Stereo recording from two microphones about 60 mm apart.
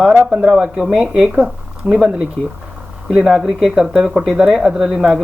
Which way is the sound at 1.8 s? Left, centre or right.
Right.